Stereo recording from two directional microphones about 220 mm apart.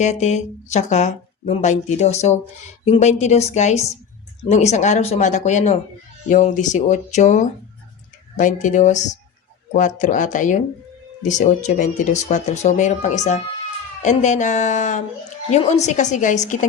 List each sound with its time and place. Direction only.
0.0 s speech: 30° left (ahead or behind)